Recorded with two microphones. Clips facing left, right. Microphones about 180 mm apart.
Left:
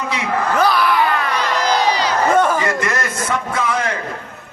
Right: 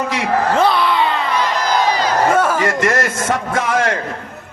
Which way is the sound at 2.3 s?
5° right (ahead or behind).